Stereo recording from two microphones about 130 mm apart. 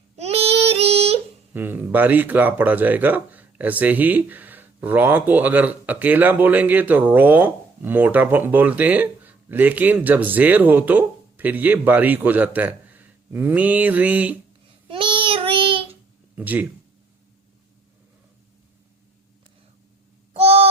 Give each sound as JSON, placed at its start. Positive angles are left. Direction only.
{"t": 0.2, "sound": "child singing", "side_deg": -50}
{"t": 1.5, "sound": "speech", "side_deg": -15}
{"t": 14.8, "sound": "child singing", "side_deg": -40}
{"t": 16.3, "sound": "speech", "side_deg": -15}
{"t": 20.3, "sound": "owl", "side_deg": -50}